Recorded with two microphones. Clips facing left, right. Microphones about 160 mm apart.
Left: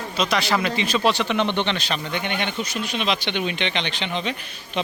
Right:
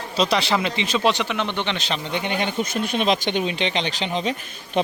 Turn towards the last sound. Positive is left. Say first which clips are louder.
# right 2 dB
turn(degrees=-40)  # may be behind; listen again after turning